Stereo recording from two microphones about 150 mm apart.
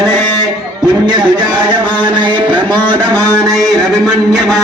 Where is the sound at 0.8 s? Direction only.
25° right (ahead or behind).